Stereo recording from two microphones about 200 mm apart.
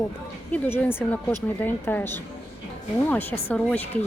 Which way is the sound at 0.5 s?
10° left (ahead or behind).